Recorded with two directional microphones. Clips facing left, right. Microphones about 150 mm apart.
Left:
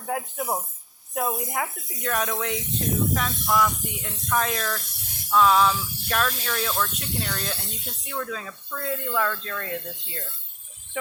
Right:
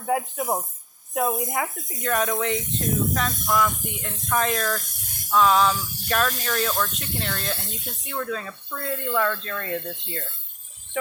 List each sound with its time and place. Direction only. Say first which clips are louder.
0.0 s speech: right 4 dB; centre (ahead or behind)
2.6 s speech: right 1 dB; 45° right (ahead or behind)
3.4 s speech: even; centre (ahead or behind)
3.7 s speech: right 1 dB; 50° right (ahead or behind)
4.3 s speech: right 2 dB; centre (ahead or behind)
4.8 s speech: even; 45° right (ahead or behind)
5.3 s speech: even; centre (ahead or behind)
5.7 s speech: even; 45° right (ahead or behind)
6.1 s speech: right 2 dB; centre (ahead or behind)
6.9 s speech: even; 50° right (ahead or behind)
7.2 s speech: right 2 dB; centre (ahead or behind)
7.5 s speech: right 2 dB; 50° right (ahead or behind)
8.0 s speech: right 2 dB; centre (ahead or behind)
11.0 s speech: right 3 dB; 5° left (ahead or behind)